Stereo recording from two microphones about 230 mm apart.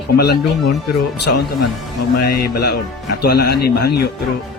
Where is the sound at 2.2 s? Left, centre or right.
Left.